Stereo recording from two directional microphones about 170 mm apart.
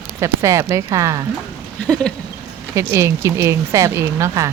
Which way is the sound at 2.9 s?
15° right (ahead or behind).